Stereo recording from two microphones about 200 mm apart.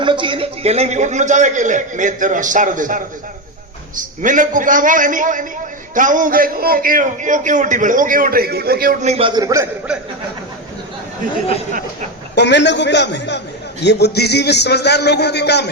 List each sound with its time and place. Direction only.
0.0 s a man's voice: 25° right (ahead or behind)
12.3 s a man's voice: 60° left (ahead or behind)